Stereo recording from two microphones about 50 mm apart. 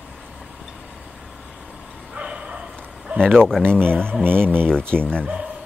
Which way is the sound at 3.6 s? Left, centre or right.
Right.